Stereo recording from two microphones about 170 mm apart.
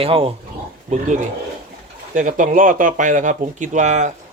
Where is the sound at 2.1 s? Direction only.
50° right (ahead or behind).